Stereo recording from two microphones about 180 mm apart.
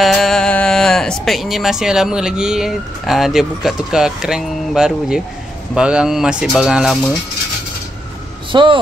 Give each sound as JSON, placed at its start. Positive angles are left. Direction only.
{"t": 0.0, "sound": "speech", "side_deg": 0}
{"t": 8.5, "sound": "speech", "side_deg": -25}